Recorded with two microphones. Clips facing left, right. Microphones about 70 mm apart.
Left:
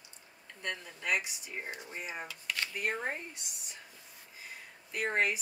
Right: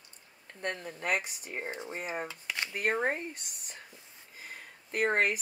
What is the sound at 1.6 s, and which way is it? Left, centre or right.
Speech, right.